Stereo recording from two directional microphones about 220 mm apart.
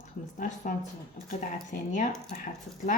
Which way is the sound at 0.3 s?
35° left (ahead or behind).